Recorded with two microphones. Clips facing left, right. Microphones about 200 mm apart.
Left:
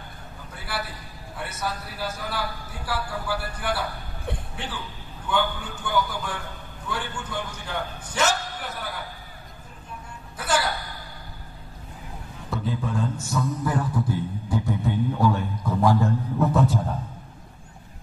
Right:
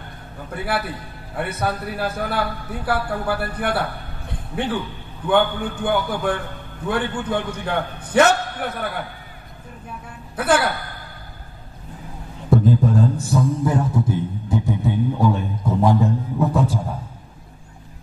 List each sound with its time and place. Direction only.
0.5 s a man's voice: 60° right (ahead or behind)
10.3 s a woman's voice: 55° right (ahead or behind)
12.4 s mantra: 40° right (ahead or behind); by 16.9 s 10° right (ahead or behind)